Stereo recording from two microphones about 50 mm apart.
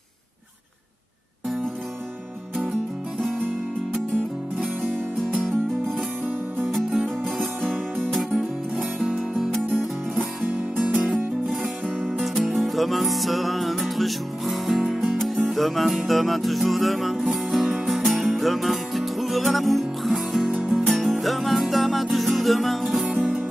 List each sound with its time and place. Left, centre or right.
3.2 s music: centre
9.5 s music: centre
10.4 s music: right
11.0 s music: centre
11.4 s music: centre